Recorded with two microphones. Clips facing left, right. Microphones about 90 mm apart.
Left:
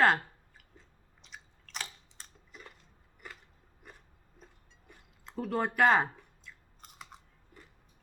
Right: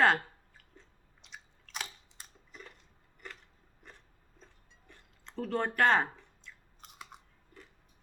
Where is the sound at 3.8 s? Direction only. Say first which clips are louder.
Left 1 dB; 10° left (ahead or behind).